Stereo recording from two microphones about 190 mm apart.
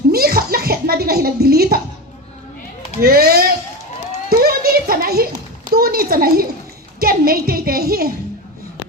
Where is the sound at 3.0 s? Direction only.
55° right (ahead or behind).